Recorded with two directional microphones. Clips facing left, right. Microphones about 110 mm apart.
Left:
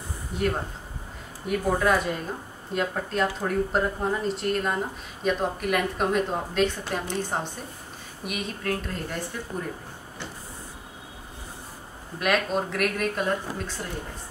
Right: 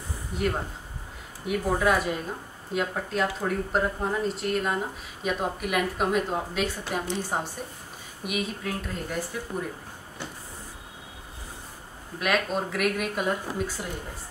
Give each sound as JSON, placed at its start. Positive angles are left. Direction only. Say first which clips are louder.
{"t": 0.3, "sound": "speech", "louder": "left 1 dB", "side_deg": 0}
{"t": 12.2, "sound": "speech", "louder": "left 2 dB", "side_deg": 0}